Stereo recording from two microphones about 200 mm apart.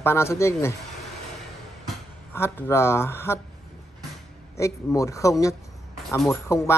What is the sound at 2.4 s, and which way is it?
Speech, 10° left (ahead or behind).